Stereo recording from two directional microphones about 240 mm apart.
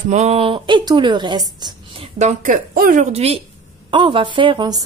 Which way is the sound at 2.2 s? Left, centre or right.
Right.